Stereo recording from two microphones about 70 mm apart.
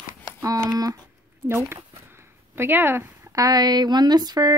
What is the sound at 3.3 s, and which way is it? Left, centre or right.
Speech, right.